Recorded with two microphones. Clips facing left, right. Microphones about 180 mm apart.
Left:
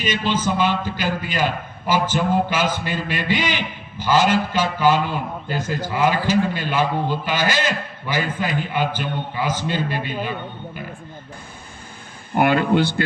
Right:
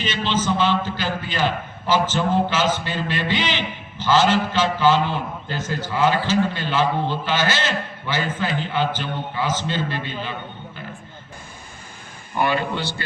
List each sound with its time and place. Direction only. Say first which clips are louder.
0.3 s a man's voice: right 1 dB; 10° left (ahead or behind)
12.3 s speech: left 5 dB; 55° left (ahead or behind)